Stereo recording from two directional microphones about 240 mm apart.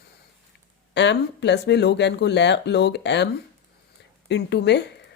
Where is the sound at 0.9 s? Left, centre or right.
Left.